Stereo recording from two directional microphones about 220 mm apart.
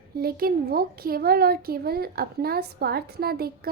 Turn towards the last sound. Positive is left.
turn(degrees=-45)  # may be behind; listen again after turning